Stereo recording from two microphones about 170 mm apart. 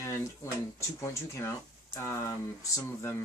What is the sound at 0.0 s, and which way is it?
Speech, 15° left (ahead or behind).